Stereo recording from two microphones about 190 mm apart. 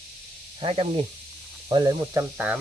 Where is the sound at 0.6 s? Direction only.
30° right (ahead or behind).